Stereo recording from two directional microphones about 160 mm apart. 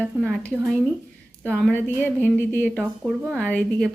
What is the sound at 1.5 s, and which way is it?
A woman's voice, 10° left (ahead or behind).